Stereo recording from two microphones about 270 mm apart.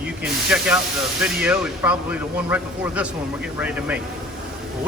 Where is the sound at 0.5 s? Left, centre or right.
Centre.